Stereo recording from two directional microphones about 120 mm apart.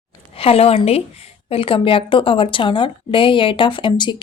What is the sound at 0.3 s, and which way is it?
A woman's voice, 55° left (ahead or behind).